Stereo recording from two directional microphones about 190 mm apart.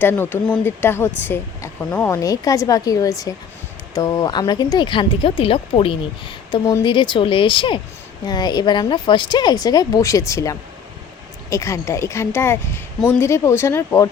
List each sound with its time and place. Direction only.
0.0 s a woman's voice: 10° left (ahead or behind)